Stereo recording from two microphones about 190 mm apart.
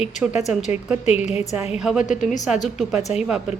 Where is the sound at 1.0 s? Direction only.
35° left (ahead or behind).